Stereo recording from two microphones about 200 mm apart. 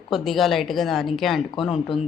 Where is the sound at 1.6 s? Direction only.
25° left (ahead or behind).